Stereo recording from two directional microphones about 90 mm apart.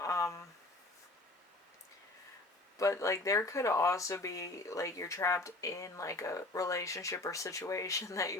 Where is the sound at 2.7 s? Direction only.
35° left (ahead or behind).